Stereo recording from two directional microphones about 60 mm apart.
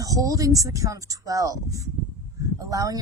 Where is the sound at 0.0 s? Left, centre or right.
Right.